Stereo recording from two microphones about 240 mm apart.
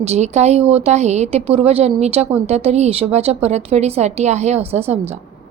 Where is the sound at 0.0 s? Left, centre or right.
Right.